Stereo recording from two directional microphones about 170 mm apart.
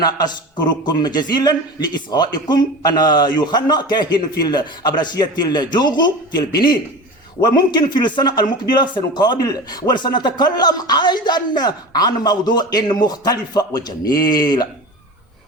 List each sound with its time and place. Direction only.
0.0 s a man's voice: 25° left (ahead or behind)
7.4 s a man's voice: 25° left (ahead or behind)